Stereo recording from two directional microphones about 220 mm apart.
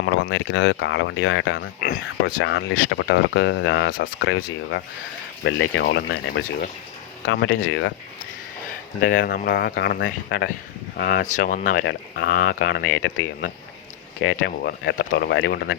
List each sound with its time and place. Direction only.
0.0 s speech: 55° left (ahead or behind)
9.0 s speech: 40° left (ahead or behind)
11.3 s speech: 40° left (ahead or behind)
11.9 s speech: 50° left (ahead or behind)